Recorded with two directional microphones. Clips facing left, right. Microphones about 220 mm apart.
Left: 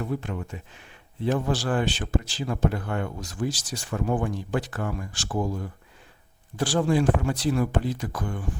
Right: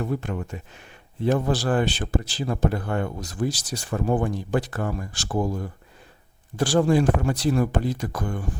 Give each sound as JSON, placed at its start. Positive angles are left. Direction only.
{"t": 0.0, "sound": "a man's voice", "side_deg": -45}